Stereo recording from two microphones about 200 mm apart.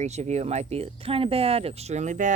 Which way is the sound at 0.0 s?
35° right (ahead or behind).